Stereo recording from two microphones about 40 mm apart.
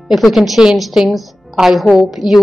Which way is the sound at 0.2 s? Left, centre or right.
Centre.